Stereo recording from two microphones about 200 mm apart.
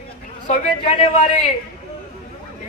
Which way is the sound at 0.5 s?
35° left (ahead or behind).